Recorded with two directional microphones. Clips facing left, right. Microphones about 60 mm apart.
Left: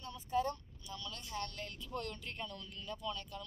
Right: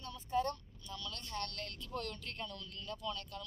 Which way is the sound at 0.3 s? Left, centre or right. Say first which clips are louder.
Even; centre.